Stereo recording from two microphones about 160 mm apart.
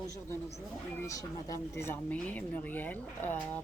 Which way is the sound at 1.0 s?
20° left (ahead or behind).